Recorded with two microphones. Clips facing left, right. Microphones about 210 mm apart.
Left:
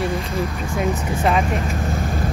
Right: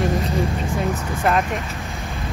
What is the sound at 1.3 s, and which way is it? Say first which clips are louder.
Speech: left 1 dB; centre (ahead or behind).